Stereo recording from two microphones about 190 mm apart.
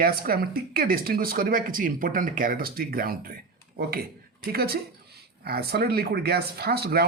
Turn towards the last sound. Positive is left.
turn(degrees=-55)  # may be behind; listen again after turning